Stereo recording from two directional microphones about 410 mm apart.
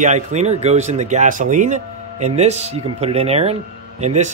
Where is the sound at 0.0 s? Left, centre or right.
Centre.